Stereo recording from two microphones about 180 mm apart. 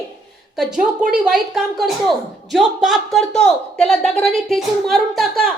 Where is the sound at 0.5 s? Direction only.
5° right (ahead or behind).